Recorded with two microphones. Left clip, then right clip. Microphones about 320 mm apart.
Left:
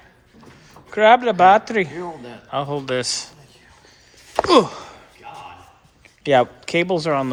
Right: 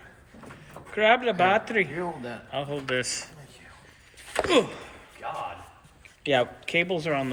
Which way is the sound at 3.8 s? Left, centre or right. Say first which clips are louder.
Even; centre.